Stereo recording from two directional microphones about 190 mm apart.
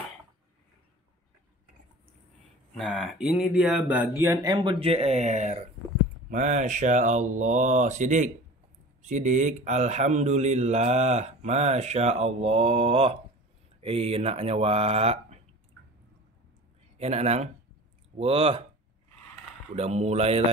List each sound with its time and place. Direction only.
2.9 s speech: 5° right (ahead or behind); by 15.4 s 35° right (ahead or behind)
17.0 s speech: 35° right (ahead or behind)
19.7 s speech: 35° right (ahead or behind)